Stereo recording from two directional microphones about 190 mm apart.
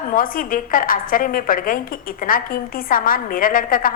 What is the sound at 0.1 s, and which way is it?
A woman's voice, 45° left (ahead or behind).